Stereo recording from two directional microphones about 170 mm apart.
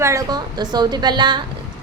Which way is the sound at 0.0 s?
20° right (ahead or behind).